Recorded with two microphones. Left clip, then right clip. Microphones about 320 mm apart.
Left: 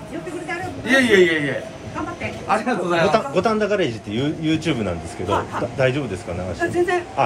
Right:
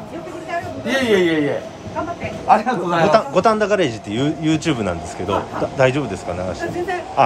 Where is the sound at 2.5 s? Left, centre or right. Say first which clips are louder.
Right 7 dB; right.